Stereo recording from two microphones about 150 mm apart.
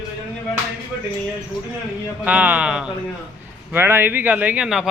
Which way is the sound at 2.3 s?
10° right (ahead or behind).